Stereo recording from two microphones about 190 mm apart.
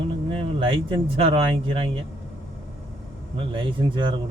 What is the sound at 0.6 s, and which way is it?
A man's voice, 25° right (ahead or behind).